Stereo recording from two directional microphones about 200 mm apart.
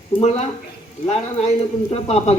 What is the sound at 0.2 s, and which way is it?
A man's voice, 35° left (ahead or behind).